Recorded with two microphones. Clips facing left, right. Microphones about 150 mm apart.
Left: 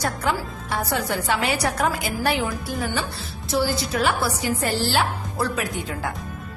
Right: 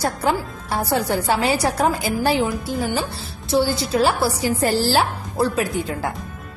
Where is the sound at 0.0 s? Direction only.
30° right (ahead or behind).